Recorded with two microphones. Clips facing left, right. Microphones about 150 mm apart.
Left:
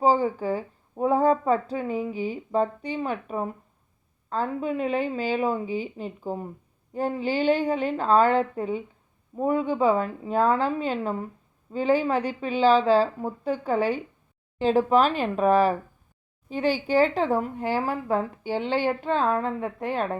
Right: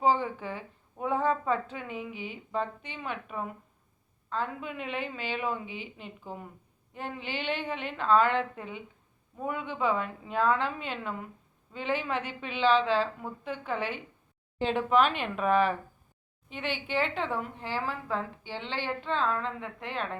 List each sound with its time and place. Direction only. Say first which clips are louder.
0.0 s speech: left 5 dB; 35° left (ahead or behind)